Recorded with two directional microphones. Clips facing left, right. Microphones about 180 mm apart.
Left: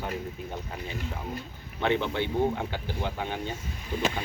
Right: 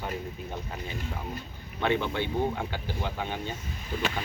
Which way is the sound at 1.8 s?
15° left (ahead or behind).